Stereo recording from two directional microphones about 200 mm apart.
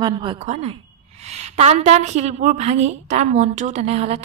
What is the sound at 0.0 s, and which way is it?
A woman's voice, 25° right (ahead or behind).